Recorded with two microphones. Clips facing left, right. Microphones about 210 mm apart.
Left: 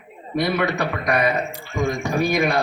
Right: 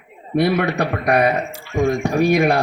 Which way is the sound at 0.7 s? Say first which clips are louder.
Right 4 dB; 60° right (ahead or behind).